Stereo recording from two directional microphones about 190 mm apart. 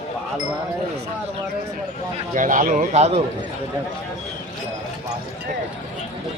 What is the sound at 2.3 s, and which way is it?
Speech, 40° right (ahead or behind).